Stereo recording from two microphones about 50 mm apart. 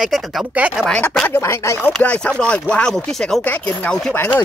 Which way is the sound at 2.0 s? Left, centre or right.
Left.